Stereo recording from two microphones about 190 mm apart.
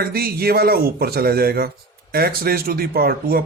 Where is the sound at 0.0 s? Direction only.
55° right (ahead or behind).